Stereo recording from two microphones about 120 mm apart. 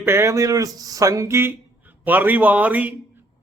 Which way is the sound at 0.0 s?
20° right (ahead or behind).